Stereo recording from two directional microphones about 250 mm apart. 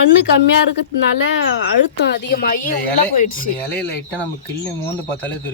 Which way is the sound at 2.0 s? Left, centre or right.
Left.